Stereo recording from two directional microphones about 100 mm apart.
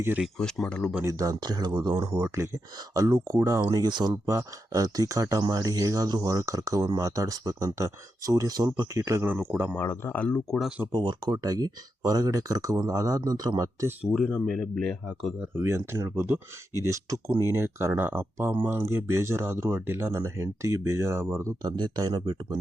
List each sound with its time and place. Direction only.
0.3 s speech: 5° left (ahead or behind)
1.0 s speech: 40° right (ahead or behind)
2.3 s speech: 25° right (ahead or behind); by 4.2 s 45° right (ahead or behind)
4.3 s speech: 35° right (ahead or behind)
9.2 s speech: 15° right (ahead or behind)
9.7 s speech: 25° left (ahead or behind)
10.2 s speech: 15° left (ahead or behind)
10.9 s speech: 45° right (ahead or behind)
14.0 s speech: 5° right (ahead or behind)
14.3 s speech: 5° left (ahead or behind)
15.5 s speech: 25° right (ahead or behind)
21.6 s speech: 50° right (ahead or behind)